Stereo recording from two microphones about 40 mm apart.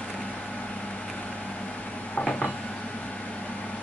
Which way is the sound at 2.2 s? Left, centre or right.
Left.